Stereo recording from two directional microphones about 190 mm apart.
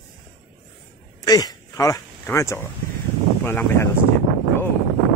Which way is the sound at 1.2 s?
20° left (ahead or behind).